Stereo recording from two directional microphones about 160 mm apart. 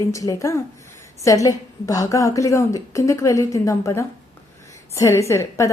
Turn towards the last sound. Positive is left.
turn(degrees=20)  # may be behind; listen again after turning